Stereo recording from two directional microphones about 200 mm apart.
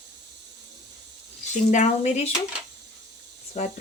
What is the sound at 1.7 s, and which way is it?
Speech, 35° left (ahead or behind).